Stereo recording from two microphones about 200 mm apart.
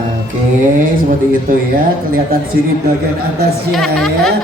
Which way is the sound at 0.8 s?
45° right (ahead or behind).